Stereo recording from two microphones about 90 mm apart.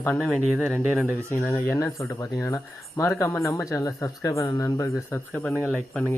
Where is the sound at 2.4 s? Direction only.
30° left (ahead or behind).